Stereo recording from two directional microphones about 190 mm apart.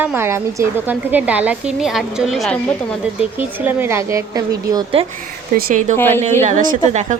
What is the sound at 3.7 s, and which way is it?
A woman's voice, 10° right (ahead or behind).